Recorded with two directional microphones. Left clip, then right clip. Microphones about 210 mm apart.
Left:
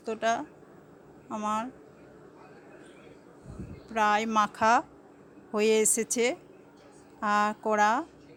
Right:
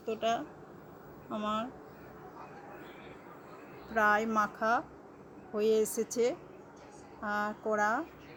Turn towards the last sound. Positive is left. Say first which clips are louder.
# left 6 dB
turn(degrees=45)  # may be behind; listen again after turning